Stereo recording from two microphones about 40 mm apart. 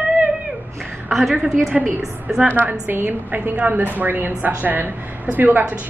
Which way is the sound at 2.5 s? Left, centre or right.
Right.